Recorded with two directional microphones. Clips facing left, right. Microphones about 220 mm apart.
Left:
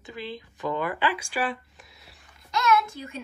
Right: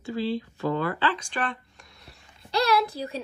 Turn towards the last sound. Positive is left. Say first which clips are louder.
# even
turn(degrees=-35)  # may be behind; listen again after turning